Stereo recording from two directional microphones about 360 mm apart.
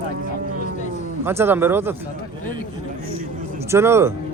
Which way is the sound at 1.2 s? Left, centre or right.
Centre.